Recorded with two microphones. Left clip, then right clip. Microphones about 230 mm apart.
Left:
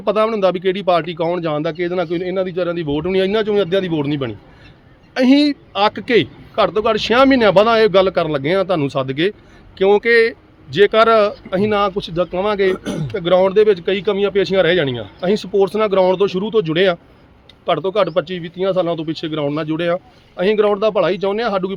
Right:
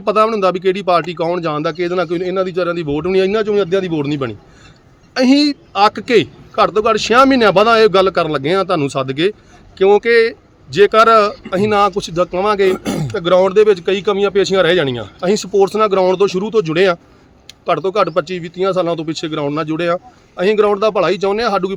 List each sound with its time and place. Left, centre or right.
0.0 s a man's voice: centre
12.7 s speech: right
13.1 s a man's voice: centre